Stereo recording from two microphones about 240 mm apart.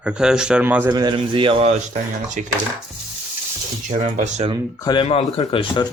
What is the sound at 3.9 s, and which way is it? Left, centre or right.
Speech, right.